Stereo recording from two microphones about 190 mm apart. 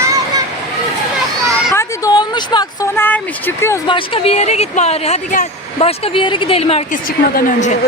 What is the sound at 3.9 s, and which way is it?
Speech, 35° left (ahead or behind).